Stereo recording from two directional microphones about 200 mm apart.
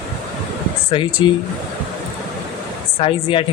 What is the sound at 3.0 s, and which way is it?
Speech, 25° left (ahead or behind).